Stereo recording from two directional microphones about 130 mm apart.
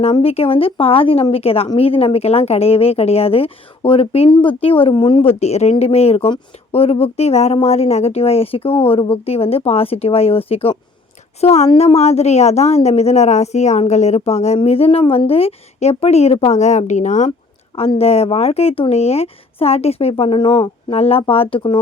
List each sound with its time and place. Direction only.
0.0 s a woman's voice: 50° left (ahead or behind); by 17.3 s 65° left (ahead or behind)
17.7 s speech: 50° left (ahead or behind)